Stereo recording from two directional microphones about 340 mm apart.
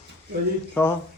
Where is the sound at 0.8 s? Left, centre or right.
Centre.